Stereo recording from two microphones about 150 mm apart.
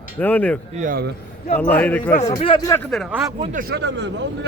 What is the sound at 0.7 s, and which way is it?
Speech, 65° right (ahead or behind).